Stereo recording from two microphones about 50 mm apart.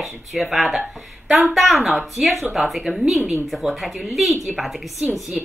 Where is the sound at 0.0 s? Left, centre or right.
Centre.